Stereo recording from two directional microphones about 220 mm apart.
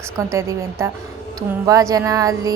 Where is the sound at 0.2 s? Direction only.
15° right (ahead or behind).